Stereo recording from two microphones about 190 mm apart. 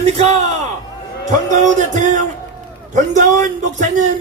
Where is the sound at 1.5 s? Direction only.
40° right (ahead or behind).